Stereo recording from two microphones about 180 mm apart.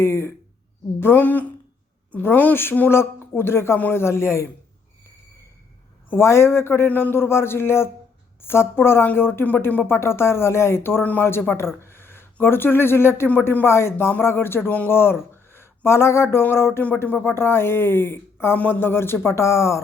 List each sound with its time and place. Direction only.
0.0 s speech: 15° left (ahead or behind)
6.1 s speech: 15° left (ahead or behind)